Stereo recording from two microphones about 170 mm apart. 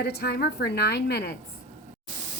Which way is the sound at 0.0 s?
70° left (ahead or behind).